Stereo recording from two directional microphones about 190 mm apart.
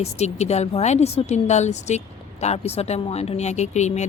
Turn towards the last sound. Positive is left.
turn(degrees=35)  # may be behind; listen again after turning